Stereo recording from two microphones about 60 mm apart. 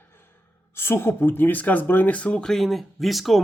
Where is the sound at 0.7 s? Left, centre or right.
Left.